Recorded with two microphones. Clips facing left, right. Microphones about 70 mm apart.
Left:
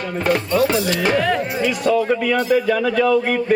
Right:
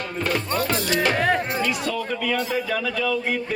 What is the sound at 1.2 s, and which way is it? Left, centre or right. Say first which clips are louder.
Speech: left 2 dB; right.